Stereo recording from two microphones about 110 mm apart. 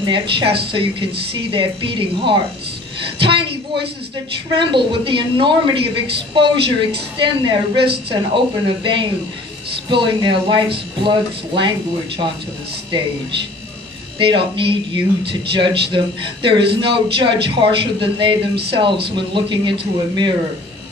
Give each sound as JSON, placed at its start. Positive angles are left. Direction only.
{"t": 0.0, "sound": "speech", "side_deg": -50}
{"t": 14.1, "sound": "speech", "side_deg": -50}